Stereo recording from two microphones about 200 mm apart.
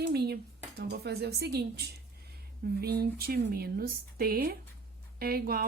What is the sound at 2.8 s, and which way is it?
Speech, 50° right (ahead or behind).